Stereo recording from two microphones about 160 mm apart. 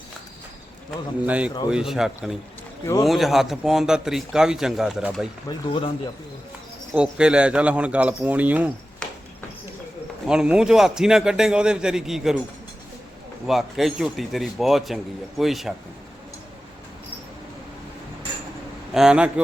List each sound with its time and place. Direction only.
1.3 s a man's voice: 10° right (ahead or behind)
5.5 s speech: 30° left (ahead or behind)
6.9 s speech: 5° right (ahead or behind)
9.0 s a sound: 5° left (ahead or behind)
10.2 s a man's voice: 5° right (ahead or behind)
13.5 s a man's voice: centre (ahead or behind)
18.9 s a man's voice: 5° right (ahead or behind)